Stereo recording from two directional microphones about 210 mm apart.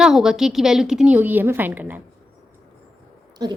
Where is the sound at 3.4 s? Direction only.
20° right (ahead or behind).